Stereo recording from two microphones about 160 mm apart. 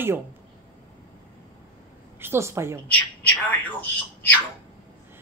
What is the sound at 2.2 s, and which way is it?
Speech, 15° right (ahead or behind).